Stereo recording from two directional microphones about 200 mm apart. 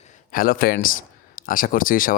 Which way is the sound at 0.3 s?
45° left (ahead or behind).